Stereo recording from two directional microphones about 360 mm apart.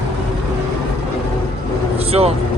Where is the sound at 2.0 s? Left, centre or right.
Centre.